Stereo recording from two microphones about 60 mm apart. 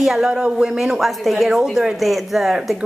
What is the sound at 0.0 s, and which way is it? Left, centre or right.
A woman's voice, centre.